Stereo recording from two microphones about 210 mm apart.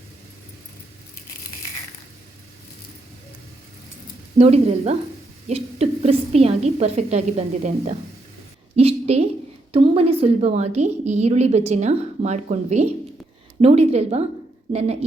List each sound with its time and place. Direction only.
4.4 s a woman's voice: 30° right (ahead or behind)
8.7 s a sound: 30° right (ahead or behind)
9.7 s a woman's voice: 25° right (ahead or behind)